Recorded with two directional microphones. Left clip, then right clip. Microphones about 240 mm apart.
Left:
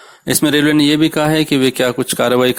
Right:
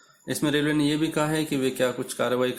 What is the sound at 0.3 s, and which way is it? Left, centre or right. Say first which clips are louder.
A man's voice: left 11 dB; left.